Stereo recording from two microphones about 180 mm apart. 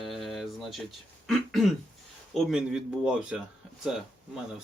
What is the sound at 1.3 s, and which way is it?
Throat clearing, centre (ahead or behind).